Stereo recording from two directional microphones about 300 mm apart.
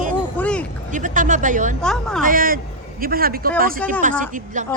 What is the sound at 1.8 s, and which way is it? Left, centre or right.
Speech, centre.